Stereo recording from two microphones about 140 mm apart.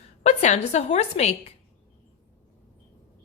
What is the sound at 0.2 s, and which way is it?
A woman's voice, 55° left (ahead or behind).